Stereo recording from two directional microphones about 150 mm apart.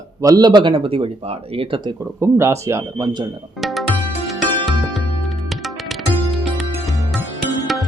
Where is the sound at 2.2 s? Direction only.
20° right (ahead or behind).